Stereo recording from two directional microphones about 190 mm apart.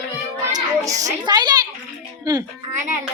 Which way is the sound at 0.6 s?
20° right (ahead or behind).